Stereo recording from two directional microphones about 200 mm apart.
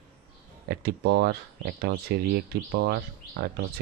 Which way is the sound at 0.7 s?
50° right (ahead or behind).